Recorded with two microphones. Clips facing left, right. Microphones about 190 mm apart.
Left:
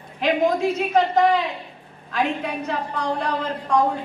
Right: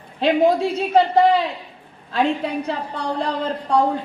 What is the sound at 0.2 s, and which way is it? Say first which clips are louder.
A woman's voice: right 3 dB; 30° right (ahead or behind).